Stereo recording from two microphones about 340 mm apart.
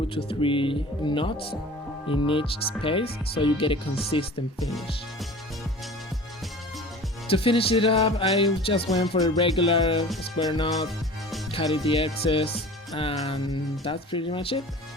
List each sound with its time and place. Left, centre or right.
0.3 s speech: centre
7.3 s speech: centre